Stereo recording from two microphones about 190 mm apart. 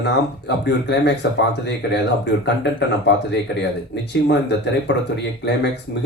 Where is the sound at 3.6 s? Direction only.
65° left (ahead or behind).